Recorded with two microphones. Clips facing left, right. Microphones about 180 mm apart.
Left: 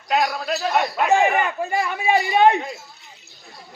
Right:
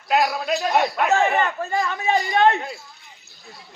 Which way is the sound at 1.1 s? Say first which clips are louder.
Left 3 dB; 15° left (ahead or behind).